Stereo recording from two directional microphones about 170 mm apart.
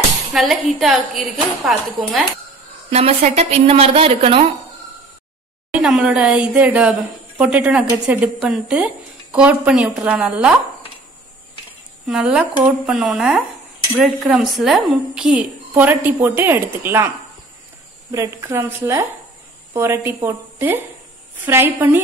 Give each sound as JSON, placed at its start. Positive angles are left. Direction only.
{"t": 0.3, "sound": "a woman's voice", "side_deg": 0}
{"t": 2.9, "sound": "a woman's voice", "side_deg": -35}
{"t": 5.7, "sound": "a woman's voice", "side_deg": -5}
{"t": 12.1, "sound": "a woman's voice", "side_deg": -5}
{"t": 18.1, "sound": "a woman's voice", "side_deg": -20}